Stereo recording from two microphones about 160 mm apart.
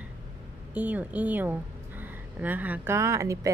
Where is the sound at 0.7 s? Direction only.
10° right (ahead or behind).